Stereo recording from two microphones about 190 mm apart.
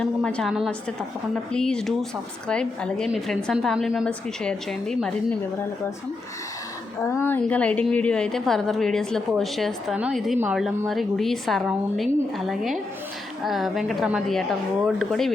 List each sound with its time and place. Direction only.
0.0 s a woman's voice: 5° left (ahead or behind)
7.0 s a woman's voice: 15° left (ahead or behind)